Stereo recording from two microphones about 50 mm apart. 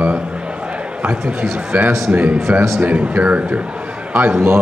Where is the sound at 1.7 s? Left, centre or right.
Right.